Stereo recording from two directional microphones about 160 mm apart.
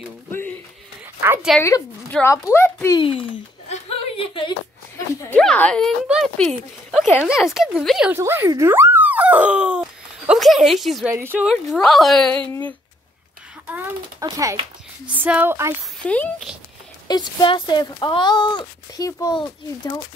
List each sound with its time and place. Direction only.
1.6 s a woman's voice: 15° left (ahead or behind)
3.0 s a sound: 35° left (ahead or behind)
4.9 s a sound: 20° left (ahead or behind)
5.4 s a woman's voice: 5° left (ahead or behind)
8.1 s speech: 15° right (ahead or behind)
11.1 s speech: 15° right (ahead or behind)
11.4 s a woman's voice: centre (ahead or behind)
14.2 s speech: 20° right (ahead or behind)
15.0 s speech: 10° right (ahead or behind)
16.0 s speech: 10° left (ahead or behind)
17.1 s speech: 25° left (ahead or behind)